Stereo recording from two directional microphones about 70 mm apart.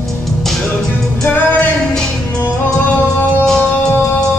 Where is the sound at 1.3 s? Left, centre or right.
Left.